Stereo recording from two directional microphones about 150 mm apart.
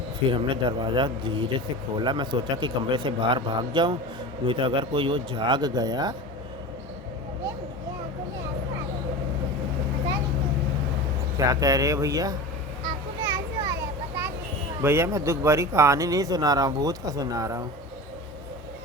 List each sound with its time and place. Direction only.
0.3 s speech: 35° right (ahead or behind)
11.3 s speech: 25° right (ahead or behind)
14.8 s speech: 15° right (ahead or behind)